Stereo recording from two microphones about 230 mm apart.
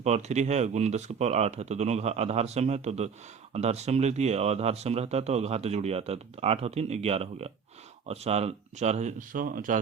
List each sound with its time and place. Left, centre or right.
0.0 s speech: right